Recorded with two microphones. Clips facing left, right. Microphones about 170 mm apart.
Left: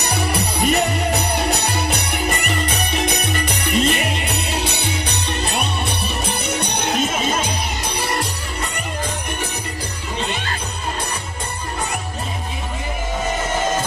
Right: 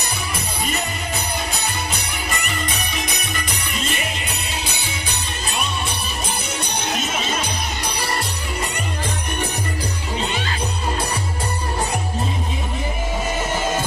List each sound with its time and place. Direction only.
0.0 s music: 70° left (ahead or behind)